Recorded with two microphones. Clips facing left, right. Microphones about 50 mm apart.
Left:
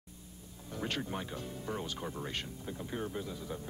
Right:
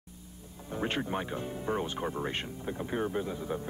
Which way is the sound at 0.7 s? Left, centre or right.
Right.